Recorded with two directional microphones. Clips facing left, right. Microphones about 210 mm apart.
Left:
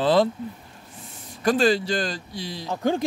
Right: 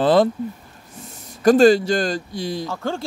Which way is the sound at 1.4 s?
45° right (ahead or behind).